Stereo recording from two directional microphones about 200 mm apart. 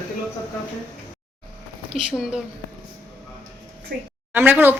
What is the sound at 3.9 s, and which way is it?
Speech, 55° right (ahead or behind).